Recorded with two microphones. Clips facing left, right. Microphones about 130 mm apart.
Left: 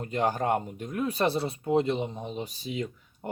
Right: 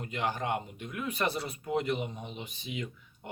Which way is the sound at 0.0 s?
40° left (ahead or behind).